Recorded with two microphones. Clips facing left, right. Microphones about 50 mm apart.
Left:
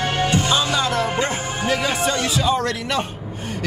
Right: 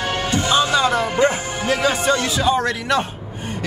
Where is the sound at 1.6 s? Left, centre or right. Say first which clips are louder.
Right 3 dB; centre.